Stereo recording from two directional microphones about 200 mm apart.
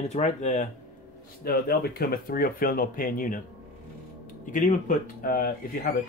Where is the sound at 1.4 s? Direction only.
50° left (ahead or behind).